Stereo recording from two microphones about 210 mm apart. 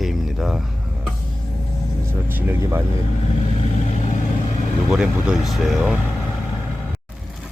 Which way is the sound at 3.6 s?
30° left (ahead or behind).